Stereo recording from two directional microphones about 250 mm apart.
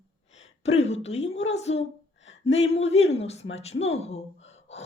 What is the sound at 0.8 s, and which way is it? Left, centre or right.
Speech, left.